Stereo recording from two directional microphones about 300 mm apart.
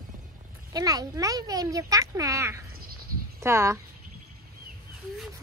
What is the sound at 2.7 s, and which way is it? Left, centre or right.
Cricket, right.